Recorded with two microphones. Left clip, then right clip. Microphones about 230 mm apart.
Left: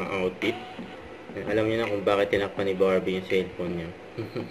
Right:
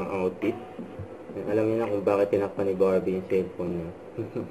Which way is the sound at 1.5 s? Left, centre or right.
Left.